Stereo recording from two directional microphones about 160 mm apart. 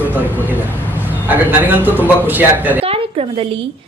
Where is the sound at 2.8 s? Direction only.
35° right (ahead or behind).